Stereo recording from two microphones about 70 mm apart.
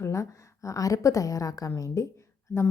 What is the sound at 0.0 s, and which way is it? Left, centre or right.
A woman's voice, left.